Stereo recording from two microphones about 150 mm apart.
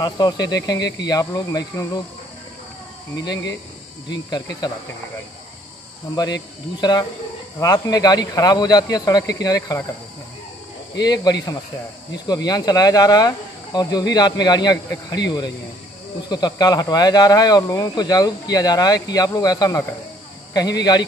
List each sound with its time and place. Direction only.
0.0 s speech: 25° left (ahead or behind)
3.2 s speech: 25° left (ahead or behind)
6.8 s speech: 30° left (ahead or behind)
11.0 s speech: 25° left (ahead or behind)